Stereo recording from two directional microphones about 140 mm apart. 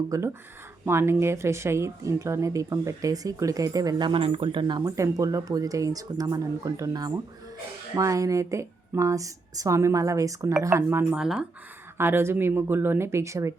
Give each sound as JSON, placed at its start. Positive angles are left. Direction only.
{"t": 0.1, "sound": "a woman's voice", "side_deg": -25}
{"t": 4.9, "sound": "a woman's voice", "side_deg": -25}